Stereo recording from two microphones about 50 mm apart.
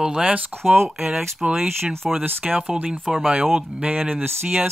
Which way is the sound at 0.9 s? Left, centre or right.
Centre.